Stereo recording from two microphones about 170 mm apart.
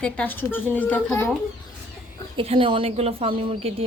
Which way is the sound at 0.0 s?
10° left (ahead or behind).